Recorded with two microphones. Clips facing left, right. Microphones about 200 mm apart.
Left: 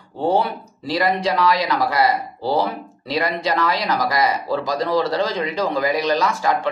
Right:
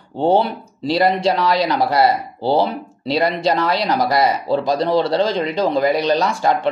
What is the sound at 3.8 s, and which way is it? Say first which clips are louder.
Speech: right 3 dB; 30° right (ahead or behind).